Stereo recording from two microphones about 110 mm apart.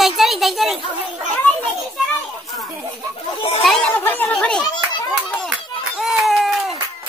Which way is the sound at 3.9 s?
15° left (ahead or behind).